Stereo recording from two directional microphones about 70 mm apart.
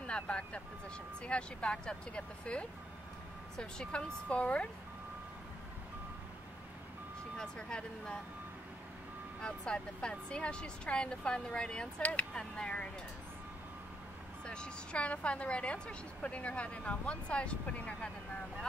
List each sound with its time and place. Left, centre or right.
0.0 s a woman's voice: centre
7.3 s a woman's voice: centre
9.4 s a woman's voice: centre
14.4 s a woman's voice: centre